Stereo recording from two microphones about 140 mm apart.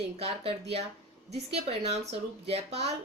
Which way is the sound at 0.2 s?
45° right (ahead or behind).